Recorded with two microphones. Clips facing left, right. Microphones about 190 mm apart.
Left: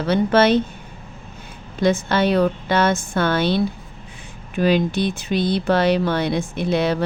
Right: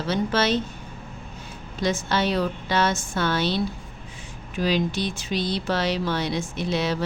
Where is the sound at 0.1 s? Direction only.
60° left (ahead or behind).